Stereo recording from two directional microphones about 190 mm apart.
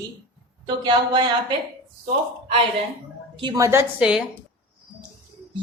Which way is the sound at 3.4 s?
20° right (ahead or behind).